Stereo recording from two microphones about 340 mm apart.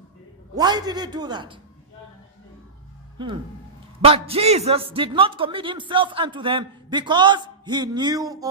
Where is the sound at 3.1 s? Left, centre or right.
Centre.